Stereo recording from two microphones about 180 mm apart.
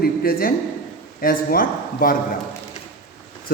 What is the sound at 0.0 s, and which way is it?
A man's voice, 55° left (ahead or behind).